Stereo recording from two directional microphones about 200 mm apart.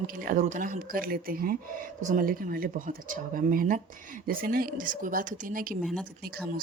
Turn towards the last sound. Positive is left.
turn(degrees=-45)  # may be behind; listen again after turning